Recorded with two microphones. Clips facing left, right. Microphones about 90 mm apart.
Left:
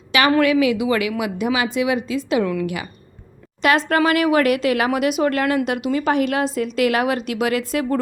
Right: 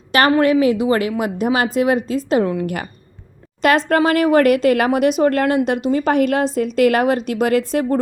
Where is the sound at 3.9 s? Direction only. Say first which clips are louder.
Right 2 dB; 35° right (ahead or behind).